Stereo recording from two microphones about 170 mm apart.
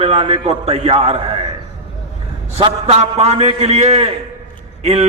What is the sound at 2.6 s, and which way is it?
A man's voice, 35° right (ahead or behind).